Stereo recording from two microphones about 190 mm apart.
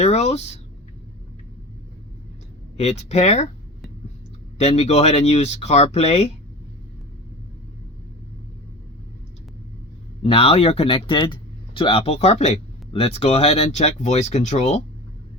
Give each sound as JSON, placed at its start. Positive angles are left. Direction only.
{"t": 0.0, "sound": "speech", "side_deg": 35}
{"t": 2.7, "sound": "speech", "side_deg": 35}
{"t": 4.5, "sound": "speech", "side_deg": 35}
{"t": 10.2, "sound": "speech", "side_deg": 30}